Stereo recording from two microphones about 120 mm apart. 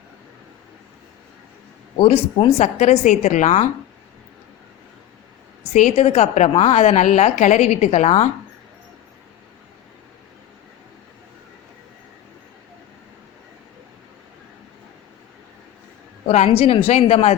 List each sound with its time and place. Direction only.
2.0 s a woman's voice: 50° left (ahead or behind); by 3.7 s 80° left
5.7 s a woman's voice: 80° left
16.3 s a woman's voice: 60° left (ahead or behind)